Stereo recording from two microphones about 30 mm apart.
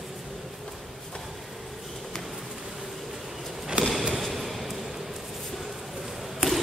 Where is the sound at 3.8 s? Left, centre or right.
Right.